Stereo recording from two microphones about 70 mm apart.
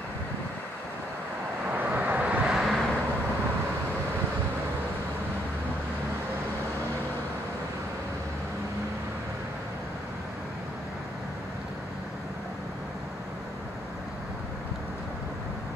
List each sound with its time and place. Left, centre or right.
1.7 s vehicle: right
2.4 s vehicle: centre